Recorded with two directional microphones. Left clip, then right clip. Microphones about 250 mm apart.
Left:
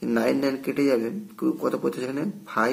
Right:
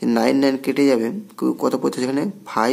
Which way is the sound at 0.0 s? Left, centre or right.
Right.